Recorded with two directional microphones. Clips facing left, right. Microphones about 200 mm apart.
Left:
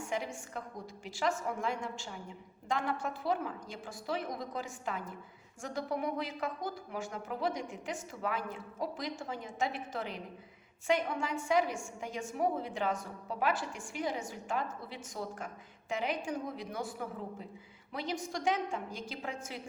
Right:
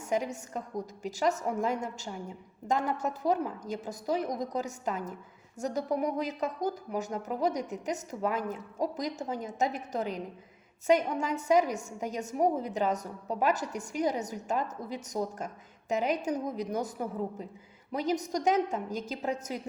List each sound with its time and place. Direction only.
0.0 s a woman's voice: 40° right (ahead or behind)